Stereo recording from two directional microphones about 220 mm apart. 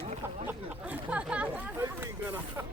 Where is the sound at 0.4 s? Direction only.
5° right (ahead or behind).